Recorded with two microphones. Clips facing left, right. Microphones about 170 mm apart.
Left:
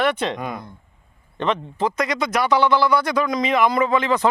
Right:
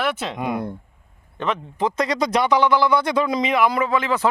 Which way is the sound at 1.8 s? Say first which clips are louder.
Right 2 dB; 30° right (ahead or behind).